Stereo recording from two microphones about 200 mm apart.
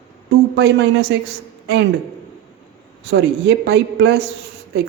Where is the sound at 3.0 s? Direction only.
60° right (ahead or behind).